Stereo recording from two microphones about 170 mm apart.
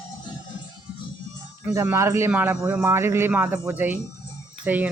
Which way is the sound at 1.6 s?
15° right (ahead or behind).